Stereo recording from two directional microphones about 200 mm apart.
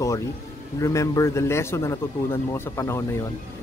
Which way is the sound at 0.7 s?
15° left (ahead or behind).